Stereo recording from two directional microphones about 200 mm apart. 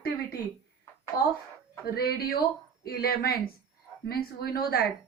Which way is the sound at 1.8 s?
50° left (ahead or behind).